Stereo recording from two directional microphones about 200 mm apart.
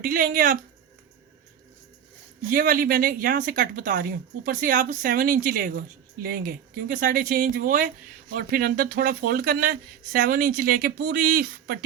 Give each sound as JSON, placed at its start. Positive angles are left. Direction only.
{"t": 0.0, "sound": "speech", "side_deg": -45}
{"t": 2.5, "sound": "speech", "side_deg": -45}